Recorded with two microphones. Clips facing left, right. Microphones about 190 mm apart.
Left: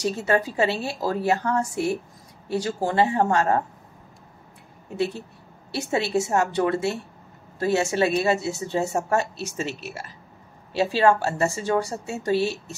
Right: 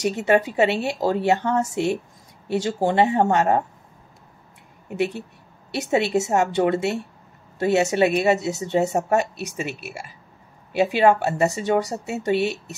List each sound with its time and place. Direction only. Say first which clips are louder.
0.0 s a woman's voice: right 3 dB; 20° right (ahead or behind)
4.8 s a woman's voice: right 2 dB; 20° right (ahead or behind)